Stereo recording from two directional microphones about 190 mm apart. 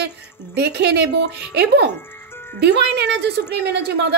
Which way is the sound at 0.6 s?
60° right (ahead or behind).